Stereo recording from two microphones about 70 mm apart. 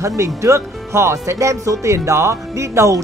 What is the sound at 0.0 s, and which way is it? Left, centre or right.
Speech, right.